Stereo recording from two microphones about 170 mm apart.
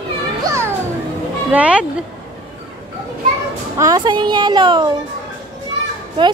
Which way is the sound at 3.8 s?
25° right (ahead or behind).